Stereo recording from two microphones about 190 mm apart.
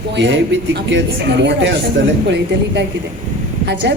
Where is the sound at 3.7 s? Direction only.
65° right (ahead or behind).